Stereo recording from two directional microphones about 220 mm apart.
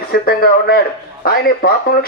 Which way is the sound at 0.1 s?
45° left (ahead or behind).